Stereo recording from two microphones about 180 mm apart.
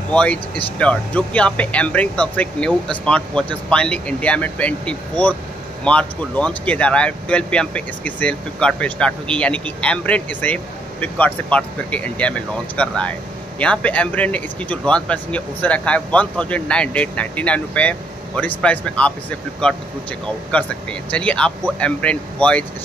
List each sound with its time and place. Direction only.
0.1 s speech: 5° left (ahead or behind)